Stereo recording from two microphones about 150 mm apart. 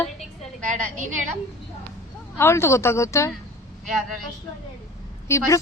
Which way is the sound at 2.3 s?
15° left (ahead or behind).